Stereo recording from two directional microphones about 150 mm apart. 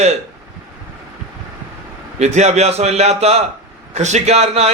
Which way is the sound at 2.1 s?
50° right (ahead or behind).